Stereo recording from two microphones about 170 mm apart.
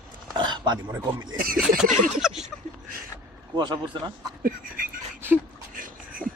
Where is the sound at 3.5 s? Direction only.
25° right (ahead or behind).